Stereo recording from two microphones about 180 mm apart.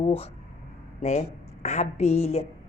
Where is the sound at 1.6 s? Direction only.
40° left (ahead or behind).